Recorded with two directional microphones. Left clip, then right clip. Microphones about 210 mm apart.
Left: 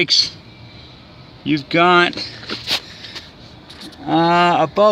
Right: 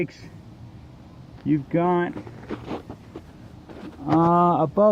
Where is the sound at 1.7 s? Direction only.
15° left (ahead or behind).